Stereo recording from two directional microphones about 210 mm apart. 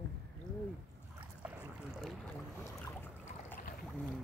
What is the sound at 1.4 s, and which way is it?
Boat, 5° right (ahead or behind).